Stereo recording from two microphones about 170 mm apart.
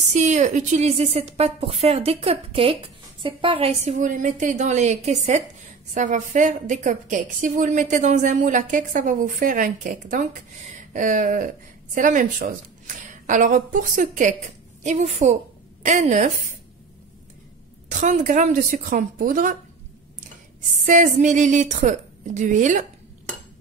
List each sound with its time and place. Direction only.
0.0 s a woman's voice: 45° right (ahead or behind)
17.8 s a woman's voice: 45° right (ahead or behind)
20.8 s a woman's voice: 50° right (ahead or behind)